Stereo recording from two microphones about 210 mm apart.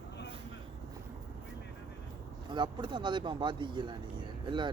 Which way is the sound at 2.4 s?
20° right (ahead or behind).